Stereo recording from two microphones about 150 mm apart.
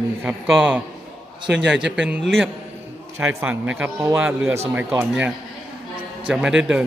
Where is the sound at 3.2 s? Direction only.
15° right (ahead or behind).